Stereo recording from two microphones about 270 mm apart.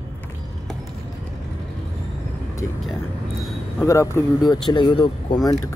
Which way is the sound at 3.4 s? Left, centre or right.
Centre.